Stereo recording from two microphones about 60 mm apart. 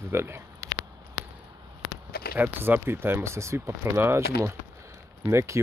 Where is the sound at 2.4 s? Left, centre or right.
Right.